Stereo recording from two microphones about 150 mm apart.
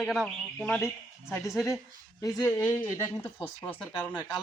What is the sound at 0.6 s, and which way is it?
Speech, 15° left (ahead or behind).